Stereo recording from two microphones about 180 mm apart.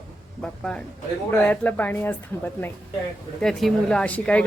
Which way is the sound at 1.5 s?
10° left (ahead or behind).